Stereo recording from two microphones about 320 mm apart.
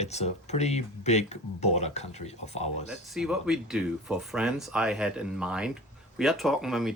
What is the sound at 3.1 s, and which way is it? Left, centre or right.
Speech, centre.